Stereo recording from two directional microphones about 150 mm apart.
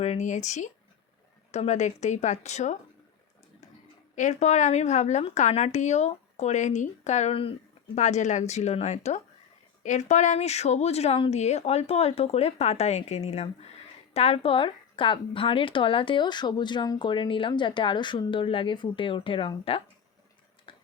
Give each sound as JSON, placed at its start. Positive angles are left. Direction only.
{"t": 0.0, "sound": "speech", "side_deg": 50}
{"t": 4.1, "sound": "speech", "side_deg": 55}
{"t": 7.9, "sound": "speech", "side_deg": 50}
{"t": 20.7, "sound": "tick-tock", "side_deg": 35}